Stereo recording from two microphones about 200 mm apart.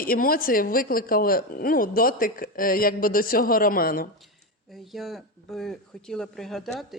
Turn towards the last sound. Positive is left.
turn(degrees=0)  # may be behind; listen again after turning